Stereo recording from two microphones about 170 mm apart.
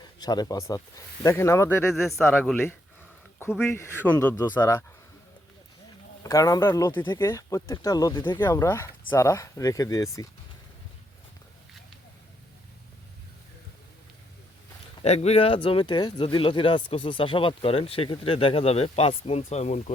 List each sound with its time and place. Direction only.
0.2 s speech: 25° left (ahead or behind)
1.9 s speech: centre (ahead or behind)
6.2 s speech: 20° left (ahead or behind)
8.4 s speech: 15° left (ahead or behind)
15.0 s speech: 40° left (ahead or behind)